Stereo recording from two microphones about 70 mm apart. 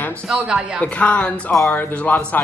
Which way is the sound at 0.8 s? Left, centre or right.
Centre.